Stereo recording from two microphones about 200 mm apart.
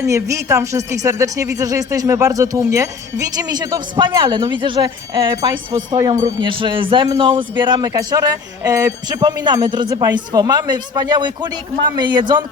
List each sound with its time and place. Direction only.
0.0 s speech: 15° right (ahead or behind)